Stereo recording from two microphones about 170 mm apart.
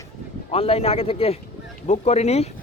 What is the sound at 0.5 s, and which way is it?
Speech, 35° left (ahead or behind).